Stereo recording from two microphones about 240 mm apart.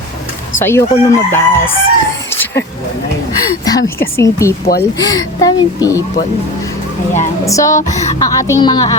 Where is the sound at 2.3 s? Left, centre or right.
Centre.